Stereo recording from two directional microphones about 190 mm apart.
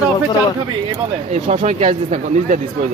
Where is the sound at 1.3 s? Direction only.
40° right (ahead or behind).